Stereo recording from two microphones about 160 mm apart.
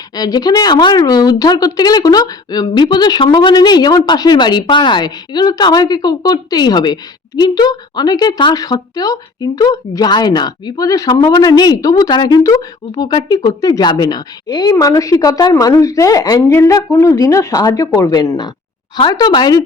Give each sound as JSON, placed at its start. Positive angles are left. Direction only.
{"t": 0.2, "sound": "a woman's voice", "side_deg": 25}